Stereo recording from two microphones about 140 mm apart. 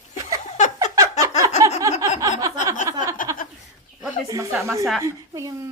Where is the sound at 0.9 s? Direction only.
25° right (ahead or behind).